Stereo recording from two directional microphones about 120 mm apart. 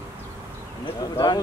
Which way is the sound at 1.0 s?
35° left (ahead or behind).